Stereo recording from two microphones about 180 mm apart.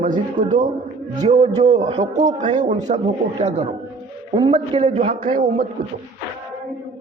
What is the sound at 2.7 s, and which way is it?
Speech, 40° right (ahead or behind).